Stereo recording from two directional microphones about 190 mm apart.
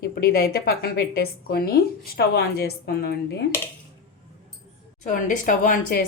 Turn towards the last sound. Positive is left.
turn(degrees=45)  # may be behind; listen again after turning